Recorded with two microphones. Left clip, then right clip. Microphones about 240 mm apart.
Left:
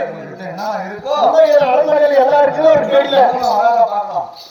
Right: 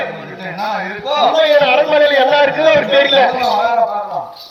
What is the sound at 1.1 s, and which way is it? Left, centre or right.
A man's voice, left.